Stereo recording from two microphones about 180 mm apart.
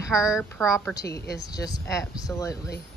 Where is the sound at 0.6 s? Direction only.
15° left (ahead or behind).